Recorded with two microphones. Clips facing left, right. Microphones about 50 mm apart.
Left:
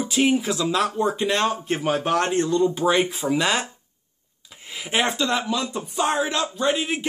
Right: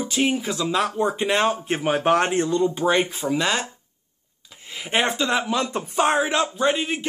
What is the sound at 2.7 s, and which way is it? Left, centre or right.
Speech, centre.